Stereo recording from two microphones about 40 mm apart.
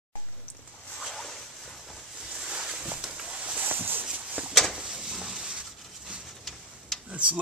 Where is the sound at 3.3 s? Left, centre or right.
Right.